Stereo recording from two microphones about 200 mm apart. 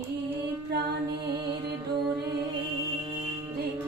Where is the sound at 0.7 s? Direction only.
55° right (ahead or behind).